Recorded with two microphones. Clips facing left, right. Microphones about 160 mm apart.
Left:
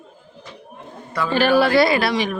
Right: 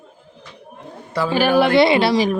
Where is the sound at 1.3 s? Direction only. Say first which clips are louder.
Right 1 dB; 10° right (ahead or behind); by 2.4 s 35° right (ahead or behind).